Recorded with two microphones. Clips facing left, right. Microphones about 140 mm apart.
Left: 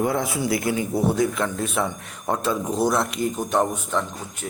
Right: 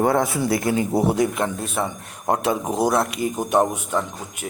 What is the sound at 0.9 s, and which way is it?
Speech, 80° right.